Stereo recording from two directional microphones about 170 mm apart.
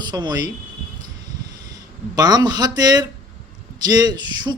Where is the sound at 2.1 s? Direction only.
25° right (ahead or behind).